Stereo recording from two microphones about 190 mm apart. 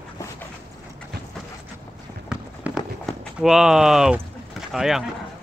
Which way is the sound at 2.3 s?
5° right (ahead or behind).